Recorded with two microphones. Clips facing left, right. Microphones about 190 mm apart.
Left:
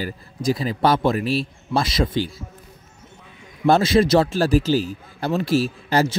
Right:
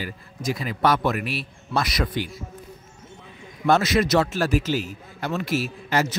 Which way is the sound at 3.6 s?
30° left (ahead or behind).